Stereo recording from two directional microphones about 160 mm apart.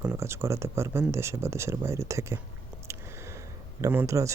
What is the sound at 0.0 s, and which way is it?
A man's voice, 20° right (ahead or behind).